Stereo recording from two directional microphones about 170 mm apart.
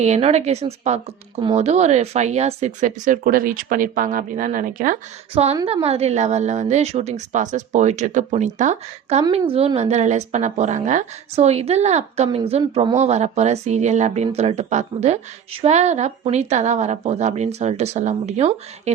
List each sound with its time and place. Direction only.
0.0 s a woman's voice: 40° right (ahead or behind)
5.3 s a woman's voice: 40° right (ahead or behind)